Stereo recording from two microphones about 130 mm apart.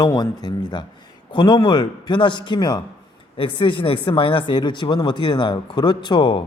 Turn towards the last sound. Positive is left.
turn(degrees=35)  # may be behind; listen again after turning